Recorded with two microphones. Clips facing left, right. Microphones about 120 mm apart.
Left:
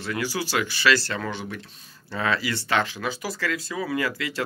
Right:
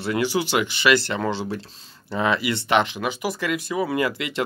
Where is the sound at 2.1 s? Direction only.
20° right (ahead or behind).